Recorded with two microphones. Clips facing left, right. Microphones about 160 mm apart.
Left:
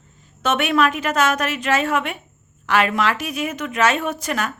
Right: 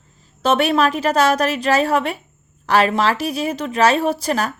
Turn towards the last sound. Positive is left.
turn(degrees=-35)  # may be behind; listen again after turning